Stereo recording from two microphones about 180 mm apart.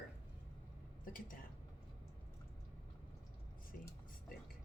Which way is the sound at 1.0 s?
50° left (ahead or behind).